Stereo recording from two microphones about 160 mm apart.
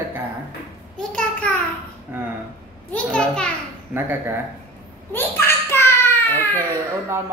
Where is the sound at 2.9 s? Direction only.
10° left (ahead or behind).